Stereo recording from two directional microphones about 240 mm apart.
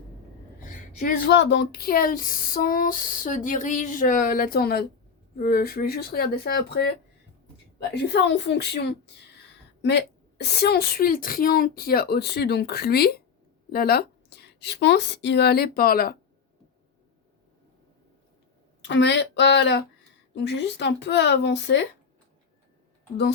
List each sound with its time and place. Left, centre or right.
0.6 s speech: left
8.1 s a woman's voice: left
18.8 s speech: left